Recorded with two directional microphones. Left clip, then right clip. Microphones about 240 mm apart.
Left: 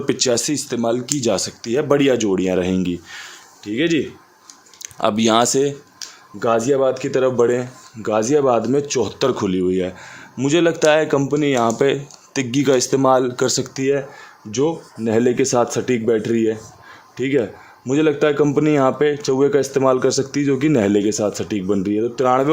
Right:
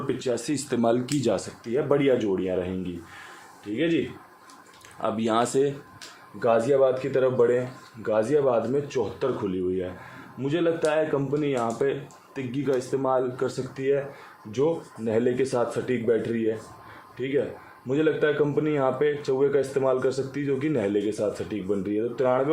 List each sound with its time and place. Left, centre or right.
0.1 s speech: left
0.5 s a man's voice: centre; by 3.9 s left
4.9 s speech: left
6.4 s a man's voice: left